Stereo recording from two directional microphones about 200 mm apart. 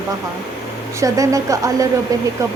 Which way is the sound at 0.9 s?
15° right (ahead or behind).